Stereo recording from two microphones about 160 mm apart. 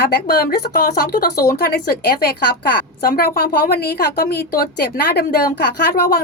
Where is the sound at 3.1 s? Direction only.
70° left (ahead or behind).